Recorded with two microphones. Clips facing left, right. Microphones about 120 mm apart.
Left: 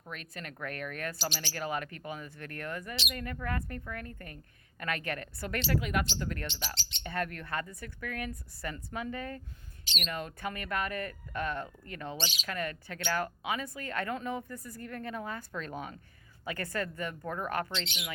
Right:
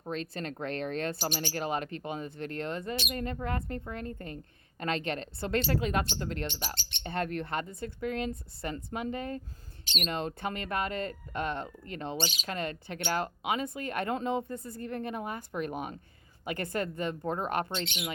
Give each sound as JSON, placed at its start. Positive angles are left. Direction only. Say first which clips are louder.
{"t": 0.0, "sound": "speech", "louder": "right 8 dB", "side_deg": -30}
{"t": 1.1, "sound": "speech", "louder": "right 4 dB", "side_deg": -50}
{"t": 1.5, "sound": "speech", "louder": "right 3 dB", "side_deg": -25}
{"t": 9.8, "sound": "speech", "louder": "right 4 dB", "side_deg": -50}
{"t": 10.1, "sound": "speech", "louder": "right 4 dB", "side_deg": -25}
{"t": 12.2, "sound": "speech", "louder": "right 3 dB", "side_deg": -45}
{"t": 12.5, "sound": "speech", "louder": "right 2 dB", "side_deg": -25}